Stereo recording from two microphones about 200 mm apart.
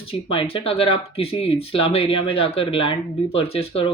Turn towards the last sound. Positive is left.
turn(degrees=30)  # may be behind; listen again after turning